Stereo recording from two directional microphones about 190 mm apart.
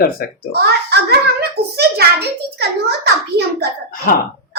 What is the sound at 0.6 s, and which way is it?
A child's voice, 55° right (ahead or behind).